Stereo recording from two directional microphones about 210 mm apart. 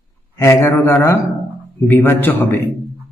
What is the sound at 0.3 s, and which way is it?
A man's voice, 10° left (ahead or behind).